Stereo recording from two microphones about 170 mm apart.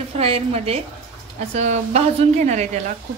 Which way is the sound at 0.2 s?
35° right (ahead or behind).